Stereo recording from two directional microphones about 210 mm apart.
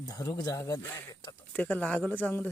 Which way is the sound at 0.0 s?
20° left (ahead or behind).